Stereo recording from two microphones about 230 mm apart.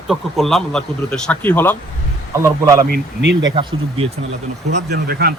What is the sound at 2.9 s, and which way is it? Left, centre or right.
Speech, right.